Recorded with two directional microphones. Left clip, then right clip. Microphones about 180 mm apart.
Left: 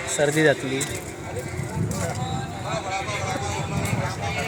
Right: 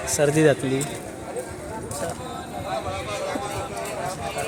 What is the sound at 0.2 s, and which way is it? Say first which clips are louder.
Speech: right 1 dB; 20° right (ahead or behind).